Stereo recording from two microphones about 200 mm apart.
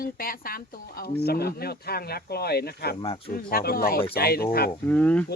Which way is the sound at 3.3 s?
50° left (ahead or behind).